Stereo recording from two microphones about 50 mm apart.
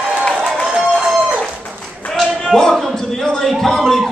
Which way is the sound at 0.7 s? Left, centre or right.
Centre.